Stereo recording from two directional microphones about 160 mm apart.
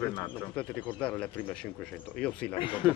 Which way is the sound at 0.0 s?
20° left (ahead or behind).